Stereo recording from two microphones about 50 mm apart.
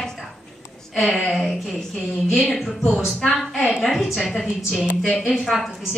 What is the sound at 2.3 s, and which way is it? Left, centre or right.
Speech, centre.